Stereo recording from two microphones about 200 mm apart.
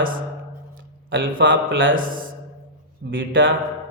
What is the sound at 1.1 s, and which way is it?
Speech, 70° right (ahead or behind).